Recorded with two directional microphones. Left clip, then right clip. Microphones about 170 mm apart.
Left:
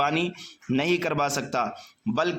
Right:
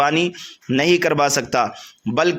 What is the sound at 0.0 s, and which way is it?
A man's voice, 30° right (ahead or behind).